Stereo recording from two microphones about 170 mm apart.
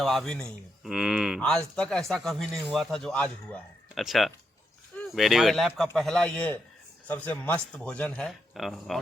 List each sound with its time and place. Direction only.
0.0 s speech: centre (ahead or behind)